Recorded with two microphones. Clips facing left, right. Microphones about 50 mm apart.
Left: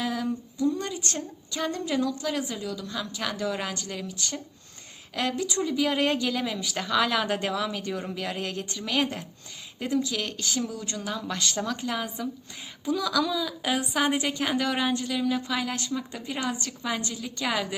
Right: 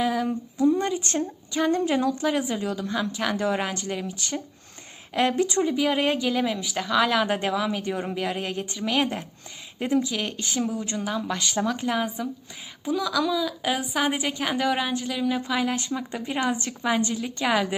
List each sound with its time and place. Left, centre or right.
0.0 s a sound: centre
0.3 s a woman's voice: right
1.8 s a woman's voice: right
2.3 s speech: centre
2.6 s a woman's voice: right
2.8 s speech: right
3.3 s a woman's voice: right
3.6 s speech: right
5.8 s a woman's voice: centre
16.6 s speech: right
17.2 s a woman's voice: centre